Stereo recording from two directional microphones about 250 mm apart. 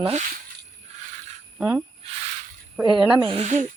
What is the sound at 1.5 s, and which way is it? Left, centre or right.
Speech, centre.